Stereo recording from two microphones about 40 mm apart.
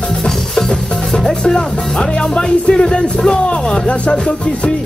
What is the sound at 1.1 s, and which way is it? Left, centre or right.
Music, centre.